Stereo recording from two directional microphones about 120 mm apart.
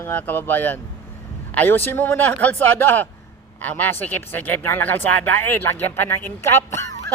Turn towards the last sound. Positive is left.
turn(degrees=25)  # may be behind; listen again after turning